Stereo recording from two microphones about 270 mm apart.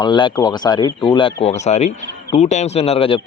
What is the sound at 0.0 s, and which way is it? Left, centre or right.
A man's voice, centre.